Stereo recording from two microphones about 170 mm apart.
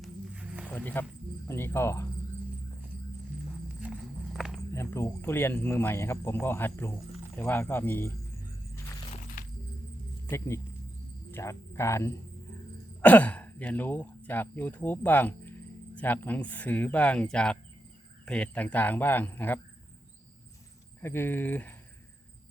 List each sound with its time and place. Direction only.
0.0 s walk: 5° right (ahead or behind)
0.6 s a sound: 10° left (ahead or behind)
1.5 s speech: 15° left (ahead or behind)
3.8 s walk: 5° right (ahead or behind)
4.7 s speech: 15° left (ahead or behind)
9.4 s music: 50° left (ahead or behind)
10.2 s speech: 15° left (ahead or behind)
21.0 s speech: 15° left (ahead or behind)